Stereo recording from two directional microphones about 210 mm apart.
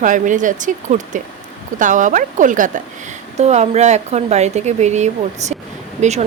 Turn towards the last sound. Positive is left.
turn(degrees=-35)  # may be behind; listen again after turning